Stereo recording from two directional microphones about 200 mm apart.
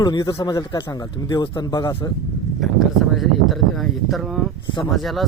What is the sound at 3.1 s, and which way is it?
Speech, centre (ahead or behind).